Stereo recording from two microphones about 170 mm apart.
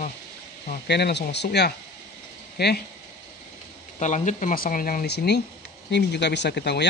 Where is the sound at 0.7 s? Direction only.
70° left (ahead or behind).